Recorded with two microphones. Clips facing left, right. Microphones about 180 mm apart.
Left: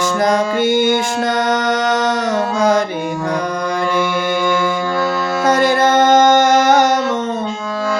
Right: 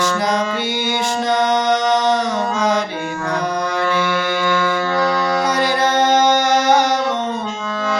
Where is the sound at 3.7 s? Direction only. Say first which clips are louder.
Left 4 dB; 10° left (ahead or behind).